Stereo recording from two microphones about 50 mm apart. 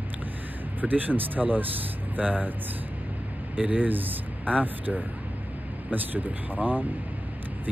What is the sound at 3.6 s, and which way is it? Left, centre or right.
Speech, right.